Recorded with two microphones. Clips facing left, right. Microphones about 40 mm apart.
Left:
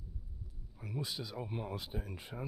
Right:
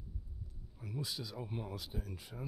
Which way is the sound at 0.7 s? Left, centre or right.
Centre.